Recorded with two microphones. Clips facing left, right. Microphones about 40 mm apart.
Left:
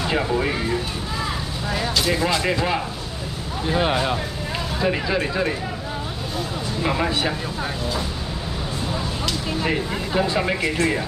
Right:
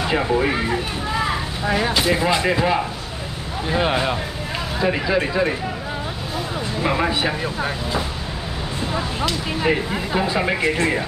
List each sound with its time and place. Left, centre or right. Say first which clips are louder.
0.1 s speech: right 3 dB; centre
6.8 s speech: right 2 dB; centre
9.6 s speech: right 5 dB; centre